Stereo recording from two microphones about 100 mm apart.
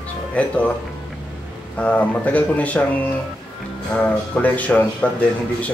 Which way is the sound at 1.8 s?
15° left (ahead or behind).